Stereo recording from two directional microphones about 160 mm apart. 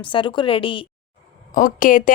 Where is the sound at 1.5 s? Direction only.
55° left (ahead or behind).